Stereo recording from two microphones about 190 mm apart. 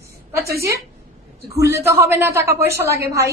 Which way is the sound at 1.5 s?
15° right (ahead or behind).